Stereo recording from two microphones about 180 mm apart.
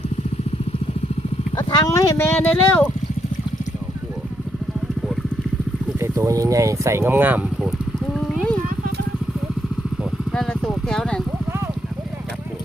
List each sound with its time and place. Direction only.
1.7 s speech: 20° left (ahead or behind)
6.0 s speech: 15° right (ahead or behind)
10.0 s vehicle: centre (ahead or behind)